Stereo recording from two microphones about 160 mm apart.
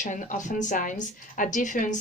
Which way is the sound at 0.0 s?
55° left (ahead or behind).